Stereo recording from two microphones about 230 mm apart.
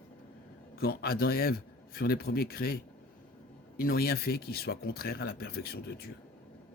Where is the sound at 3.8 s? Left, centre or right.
Left.